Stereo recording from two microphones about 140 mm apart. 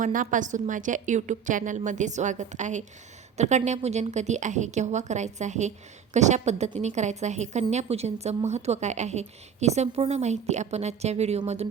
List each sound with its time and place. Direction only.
0.0 s a woman's voice: 70° right (ahead or behind); by 11.7 s 50° right (ahead or behind)